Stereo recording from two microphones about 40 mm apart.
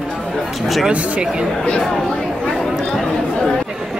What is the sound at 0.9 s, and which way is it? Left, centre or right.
Speech, right.